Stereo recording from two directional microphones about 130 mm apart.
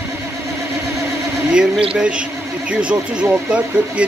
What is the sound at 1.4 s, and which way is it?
Speech, 5° right (ahead or behind).